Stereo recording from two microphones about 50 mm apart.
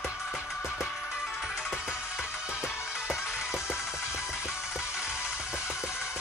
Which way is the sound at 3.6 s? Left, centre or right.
Left.